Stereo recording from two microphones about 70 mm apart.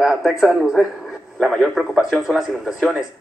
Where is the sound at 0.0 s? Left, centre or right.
Centre.